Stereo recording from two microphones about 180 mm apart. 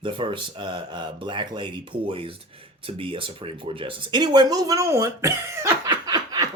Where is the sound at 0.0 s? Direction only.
30° right (ahead or behind).